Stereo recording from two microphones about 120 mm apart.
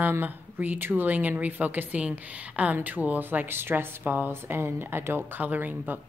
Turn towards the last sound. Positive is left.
turn(degrees=-15)  # may be behind; listen again after turning